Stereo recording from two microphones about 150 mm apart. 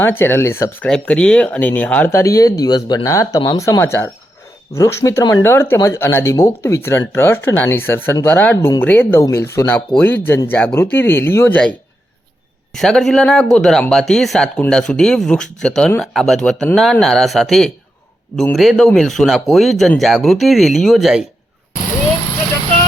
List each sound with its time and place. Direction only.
0.0 s speech: 15° left (ahead or behind)
0.9 s speech: 5° left (ahead or behind)
12.7 s speech: centre (ahead or behind)